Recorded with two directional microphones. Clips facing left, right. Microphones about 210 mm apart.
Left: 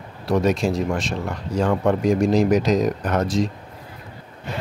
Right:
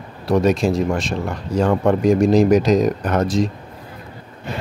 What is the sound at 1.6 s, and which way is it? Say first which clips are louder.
Speech: right 3 dB; 40° right (ahead or behind).